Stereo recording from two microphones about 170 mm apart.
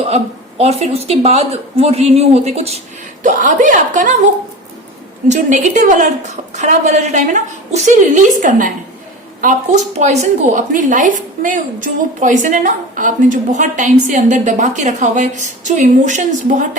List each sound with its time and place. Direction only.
0.6 s speech: 40° right (ahead or behind)
3.2 s a woman's voice: 50° right (ahead or behind)
5.3 s a woman's voice: 45° right (ahead or behind)